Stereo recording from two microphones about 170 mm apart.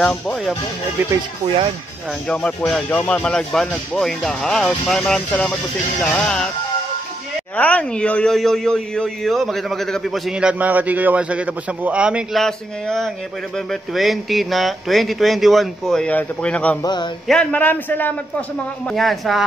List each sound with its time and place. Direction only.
0.0 s speech: 5° left (ahead or behind)
2.2 s speech: 5° left (ahead or behind)
7.5 s speech: 10° left (ahead or behind)
16.8 s a sound: 25° left (ahead or behind)
17.3 s a man's voice: 5° left (ahead or behind)